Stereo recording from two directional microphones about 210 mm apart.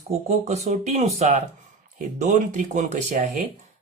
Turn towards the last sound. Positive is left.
turn(degrees=-35)  # may be behind; listen again after turning